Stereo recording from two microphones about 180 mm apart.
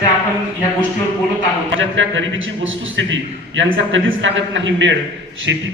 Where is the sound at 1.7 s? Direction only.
90° right.